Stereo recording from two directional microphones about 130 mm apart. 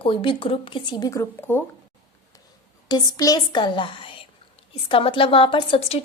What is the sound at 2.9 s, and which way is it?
A woman's voice, 30° left (ahead or behind).